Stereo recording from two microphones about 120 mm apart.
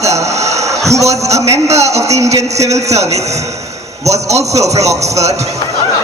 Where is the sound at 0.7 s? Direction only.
25° right (ahead or behind).